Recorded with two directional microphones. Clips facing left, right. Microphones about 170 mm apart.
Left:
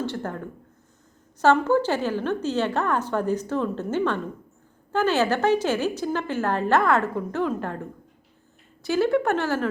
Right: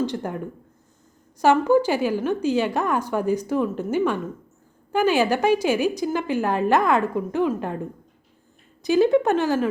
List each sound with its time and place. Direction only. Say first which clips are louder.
0.0 s a woman's voice: right 3 dB; 15° right (ahead or behind)